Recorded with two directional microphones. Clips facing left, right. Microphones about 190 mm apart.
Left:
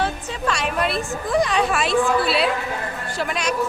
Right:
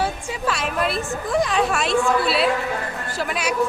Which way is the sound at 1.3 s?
Centre (ahead or behind).